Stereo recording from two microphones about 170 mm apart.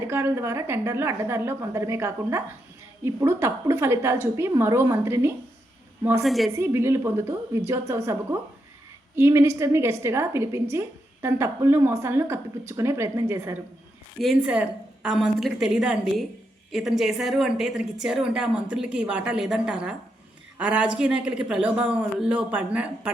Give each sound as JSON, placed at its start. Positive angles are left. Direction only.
{"t": 0.1, "sound": "a woman's voice", "side_deg": -15}
{"t": 6.2, "sound": "a woman's voice", "side_deg": 0}
{"t": 6.5, "sound": "a woman's voice", "side_deg": -15}
{"t": 14.2, "sound": "a woman's voice", "side_deg": -5}